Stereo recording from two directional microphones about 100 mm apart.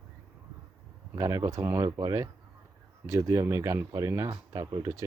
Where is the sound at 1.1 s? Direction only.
35° right (ahead or behind).